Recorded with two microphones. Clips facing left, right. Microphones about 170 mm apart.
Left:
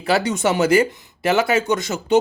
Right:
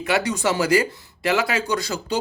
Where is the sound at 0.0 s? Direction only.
30° left (ahead or behind).